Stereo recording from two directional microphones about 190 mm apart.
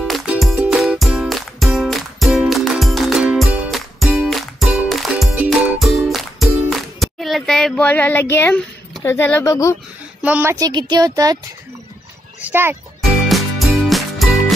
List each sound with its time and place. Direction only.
0.0 s music: centre (ahead or behind)
9.0 s speech: 10° left (ahead or behind)
10.2 s speech: 10° right (ahead or behind)
12.4 s a child's voice: 10° right (ahead or behind)
13.1 s music: centre (ahead or behind)